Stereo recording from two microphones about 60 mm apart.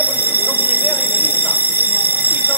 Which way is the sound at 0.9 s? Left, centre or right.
Right.